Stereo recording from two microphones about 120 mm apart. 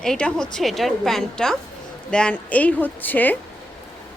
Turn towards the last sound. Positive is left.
turn(degrees=15)  # may be behind; listen again after turning